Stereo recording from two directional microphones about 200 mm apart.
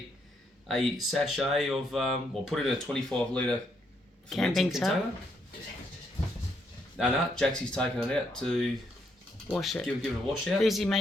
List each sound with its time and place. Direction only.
0.7 s speech: centre (ahead or behind)
6.9 s speech: centre (ahead or behind)